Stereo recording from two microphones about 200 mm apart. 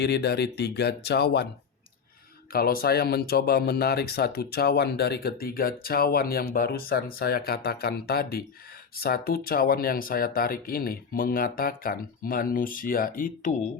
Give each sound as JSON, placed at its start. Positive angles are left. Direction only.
{"t": 0.0, "sound": "speech", "side_deg": 55}
{"t": 2.5, "sound": "speech", "side_deg": 50}